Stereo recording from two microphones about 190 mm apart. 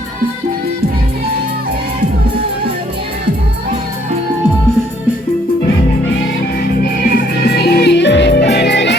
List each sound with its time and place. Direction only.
7.0 s music: 50° left (ahead or behind)